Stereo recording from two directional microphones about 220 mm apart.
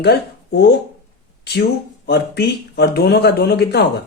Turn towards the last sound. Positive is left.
turn(degrees=50)  # may be behind; listen again after turning